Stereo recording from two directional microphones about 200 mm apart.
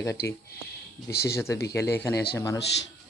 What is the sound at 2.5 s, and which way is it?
Speech, 60° left (ahead or behind).